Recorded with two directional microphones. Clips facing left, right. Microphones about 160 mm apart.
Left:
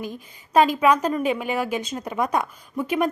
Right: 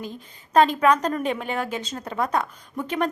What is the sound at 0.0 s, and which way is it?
A woman's voice, 10° left (ahead or behind).